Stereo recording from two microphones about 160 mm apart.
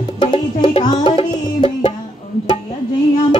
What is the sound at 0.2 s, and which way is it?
Music, 30° left (ahead or behind).